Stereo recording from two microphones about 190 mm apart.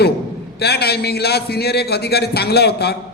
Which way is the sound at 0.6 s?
55° left (ahead or behind).